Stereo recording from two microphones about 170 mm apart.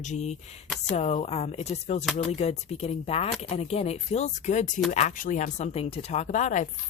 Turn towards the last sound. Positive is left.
turn(degrees=45)  # may be behind; listen again after turning